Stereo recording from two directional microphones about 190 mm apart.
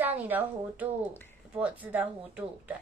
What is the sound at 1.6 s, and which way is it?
A woman's voice, 10° right (ahead or behind).